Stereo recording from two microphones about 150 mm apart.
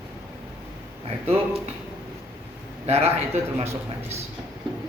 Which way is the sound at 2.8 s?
45° right (ahead or behind).